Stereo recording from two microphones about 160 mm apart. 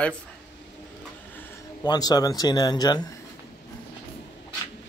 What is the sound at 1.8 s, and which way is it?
Speech, 25° left (ahead or behind).